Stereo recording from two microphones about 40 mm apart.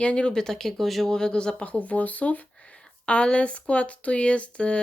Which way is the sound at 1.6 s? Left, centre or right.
Left.